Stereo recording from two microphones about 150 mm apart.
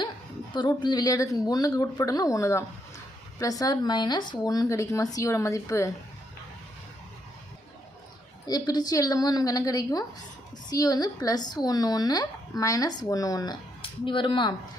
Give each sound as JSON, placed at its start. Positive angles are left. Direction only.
{"t": 0.5, "sound": "speech", "side_deg": 30}
{"t": 8.4, "sound": "speech", "side_deg": 25}